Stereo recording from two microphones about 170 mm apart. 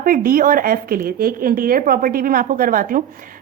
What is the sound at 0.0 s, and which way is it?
A woman's voice, 55° right (ahead or behind).